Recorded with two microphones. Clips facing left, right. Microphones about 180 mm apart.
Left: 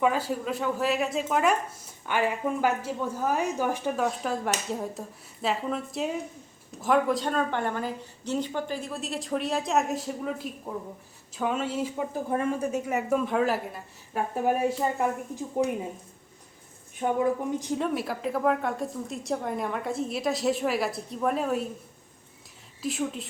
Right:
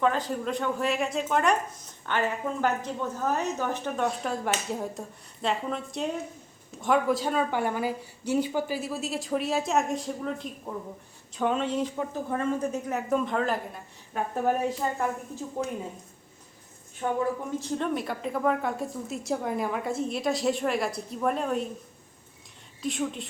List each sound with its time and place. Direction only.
0.0 s a woman's voice: 10° left (ahead or behind)
17.0 s a woman's voice: 15° left (ahead or behind)
22.8 s a woman's voice: centre (ahead or behind)